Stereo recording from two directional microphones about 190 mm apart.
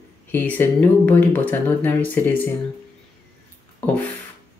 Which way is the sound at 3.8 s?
10° left (ahead or behind).